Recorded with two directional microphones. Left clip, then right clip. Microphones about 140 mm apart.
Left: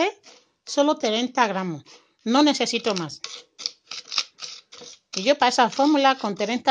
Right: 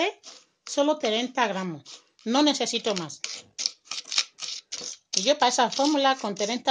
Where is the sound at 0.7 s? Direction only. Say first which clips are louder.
Left 3 dB; 35° left (ahead or behind).